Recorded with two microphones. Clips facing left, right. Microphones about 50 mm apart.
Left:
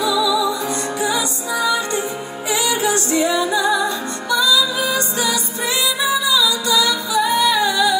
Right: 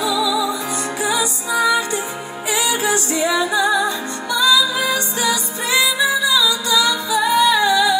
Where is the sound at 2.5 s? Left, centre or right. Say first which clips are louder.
Even; right.